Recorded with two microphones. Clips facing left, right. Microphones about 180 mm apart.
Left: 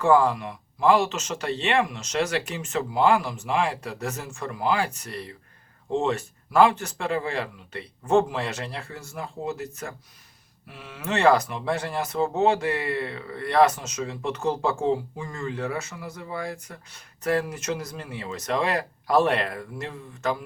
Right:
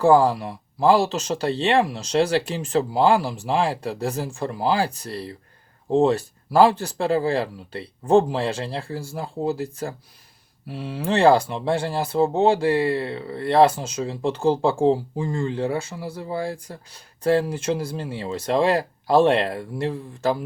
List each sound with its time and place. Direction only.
0.0 s speech: 35° right (ahead or behind)